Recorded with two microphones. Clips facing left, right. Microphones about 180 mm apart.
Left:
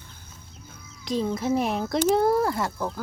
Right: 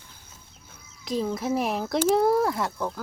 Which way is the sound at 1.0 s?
Centre (ahead or behind).